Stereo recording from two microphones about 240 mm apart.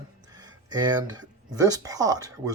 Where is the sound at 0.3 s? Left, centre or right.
Centre.